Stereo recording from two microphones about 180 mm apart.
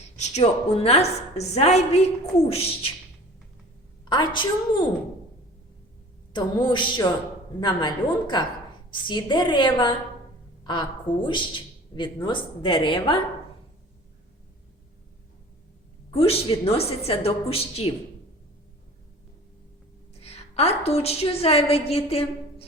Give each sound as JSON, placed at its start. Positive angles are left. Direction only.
{"t": 0.2, "sound": "a woman's voice", "side_deg": 35}
{"t": 4.0, "sound": "speech", "side_deg": 25}
{"t": 6.3, "sound": "speech", "side_deg": 25}
{"t": 16.1, "sound": "a woman's voice", "side_deg": 35}
{"t": 20.1, "sound": "a woman's voice", "side_deg": 35}